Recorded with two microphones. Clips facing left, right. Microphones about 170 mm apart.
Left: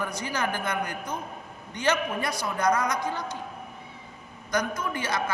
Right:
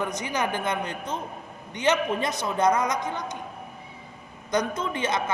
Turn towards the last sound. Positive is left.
turn(degrees=-20)  # may be behind; listen again after turning